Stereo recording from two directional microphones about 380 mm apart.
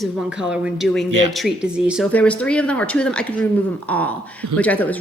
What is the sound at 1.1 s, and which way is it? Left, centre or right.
Speech, right.